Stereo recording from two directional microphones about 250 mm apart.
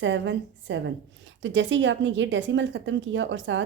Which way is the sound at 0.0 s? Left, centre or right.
Right.